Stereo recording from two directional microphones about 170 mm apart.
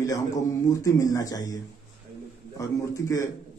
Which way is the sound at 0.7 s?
20° left (ahead or behind).